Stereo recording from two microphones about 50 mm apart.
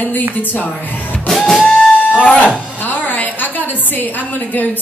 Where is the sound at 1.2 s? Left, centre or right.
Centre.